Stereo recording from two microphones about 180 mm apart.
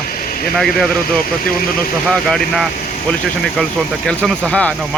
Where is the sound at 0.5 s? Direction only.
5° left (ahead or behind).